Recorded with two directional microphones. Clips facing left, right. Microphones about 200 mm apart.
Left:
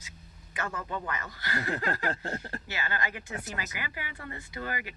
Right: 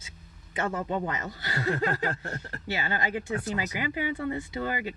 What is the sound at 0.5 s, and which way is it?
Speech, 25° right (ahead or behind).